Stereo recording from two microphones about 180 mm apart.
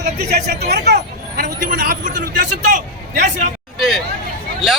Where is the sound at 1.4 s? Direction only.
50° right (ahead or behind).